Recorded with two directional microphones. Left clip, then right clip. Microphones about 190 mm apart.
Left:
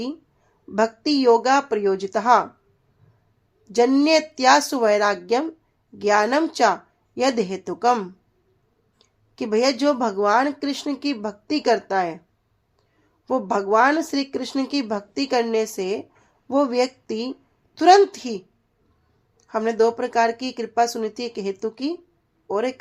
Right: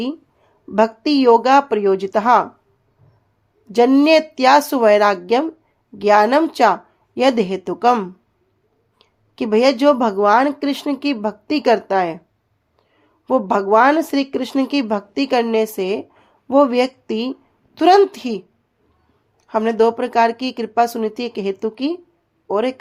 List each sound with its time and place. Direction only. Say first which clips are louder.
0.7 s speech: right 5 dB; 30° right (ahead or behind)
3.6 s speech: right 5 dB; 30° right (ahead or behind)
13.2 s speech: right 5 dB; 30° right (ahead or behind)